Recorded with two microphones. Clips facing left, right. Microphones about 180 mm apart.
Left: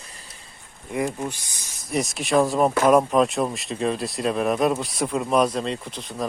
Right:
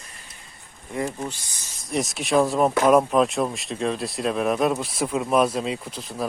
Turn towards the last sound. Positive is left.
turn(degrees=-5)  # may be behind; listen again after turning